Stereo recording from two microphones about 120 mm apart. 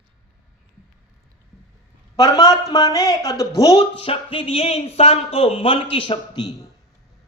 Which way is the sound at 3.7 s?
50° left (ahead or behind).